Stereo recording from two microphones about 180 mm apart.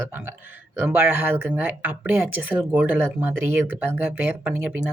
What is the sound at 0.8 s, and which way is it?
Speech, 10° right (ahead or behind).